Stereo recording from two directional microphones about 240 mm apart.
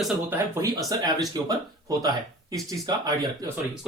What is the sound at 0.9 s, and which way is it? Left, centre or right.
Speech, centre.